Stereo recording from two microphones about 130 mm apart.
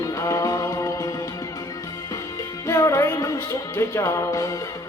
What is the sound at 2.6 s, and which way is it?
Music, 25° left (ahead or behind).